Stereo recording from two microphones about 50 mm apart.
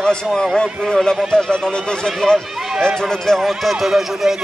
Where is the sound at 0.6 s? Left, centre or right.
Centre.